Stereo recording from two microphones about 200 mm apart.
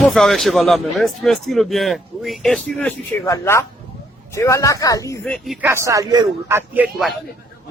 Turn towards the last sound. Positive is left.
turn(degrees=-5)  # may be behind; listen again after turning